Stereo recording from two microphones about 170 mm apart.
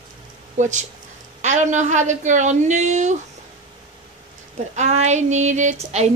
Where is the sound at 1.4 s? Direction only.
45° right (ahead or behind).